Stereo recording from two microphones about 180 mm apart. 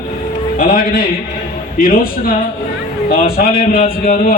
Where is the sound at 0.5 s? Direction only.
55° left (ahead or behind).